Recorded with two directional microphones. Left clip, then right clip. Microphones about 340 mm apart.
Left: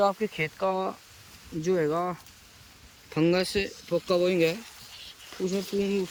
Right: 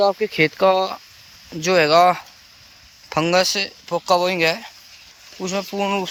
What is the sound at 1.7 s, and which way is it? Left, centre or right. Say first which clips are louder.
Speech: right 13 dB; right.